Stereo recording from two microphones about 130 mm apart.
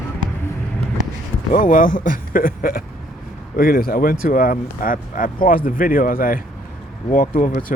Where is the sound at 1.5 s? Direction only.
90° left.